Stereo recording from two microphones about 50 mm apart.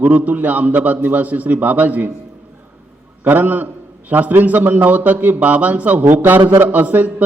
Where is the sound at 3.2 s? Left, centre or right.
Right.